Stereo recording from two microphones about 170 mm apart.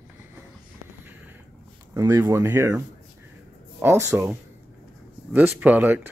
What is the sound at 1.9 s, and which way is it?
Speech, 20° right (ahead or behind).